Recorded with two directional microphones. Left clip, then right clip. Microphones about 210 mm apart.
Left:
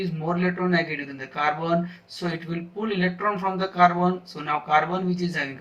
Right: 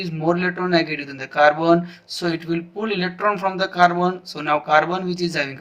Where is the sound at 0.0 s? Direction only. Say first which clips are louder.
Right 5 dB; 45° right (ahead or behind).